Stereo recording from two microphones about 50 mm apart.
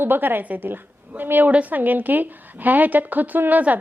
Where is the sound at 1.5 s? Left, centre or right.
Right.